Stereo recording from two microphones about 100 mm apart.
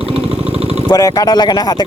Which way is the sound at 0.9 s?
40° left (ahead or behind).